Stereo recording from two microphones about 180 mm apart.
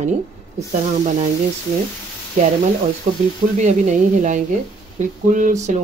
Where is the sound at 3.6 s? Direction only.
40° right (ahead or behind).